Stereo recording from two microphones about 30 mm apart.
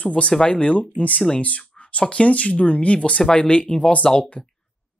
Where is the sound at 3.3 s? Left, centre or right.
Left.